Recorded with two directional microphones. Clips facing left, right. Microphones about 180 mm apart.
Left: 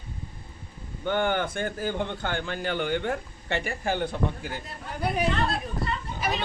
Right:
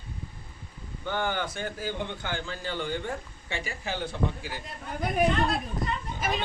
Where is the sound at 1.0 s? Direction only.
60° left (ahead or behind).